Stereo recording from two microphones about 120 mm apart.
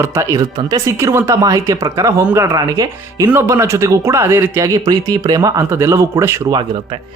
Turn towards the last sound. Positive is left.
turn(degrees=-45)  # may be behind; listen again after turning